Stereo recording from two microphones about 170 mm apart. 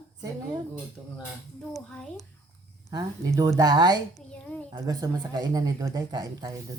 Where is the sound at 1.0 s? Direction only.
5° left (ahead or behind).